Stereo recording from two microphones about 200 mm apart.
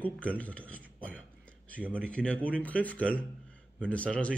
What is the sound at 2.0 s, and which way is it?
Speech, 5° left (ahead or behind).